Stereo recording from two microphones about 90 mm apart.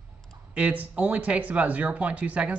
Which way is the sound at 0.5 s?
15° right (ahead or behind).